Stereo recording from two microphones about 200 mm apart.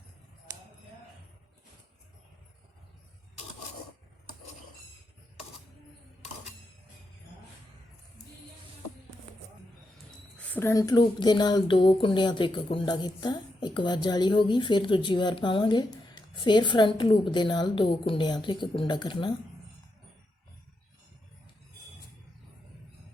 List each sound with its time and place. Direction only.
10.3 s a woman's voice: 5° left (ahead or behind); by 19.3 s 25° left (ahead or behind)